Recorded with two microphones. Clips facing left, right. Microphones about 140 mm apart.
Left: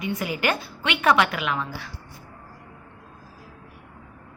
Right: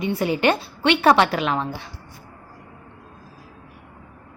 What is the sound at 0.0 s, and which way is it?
A woman's voice, 30° right (ahead or behind).